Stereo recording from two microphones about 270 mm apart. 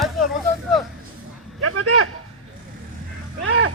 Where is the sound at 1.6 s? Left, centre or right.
Right.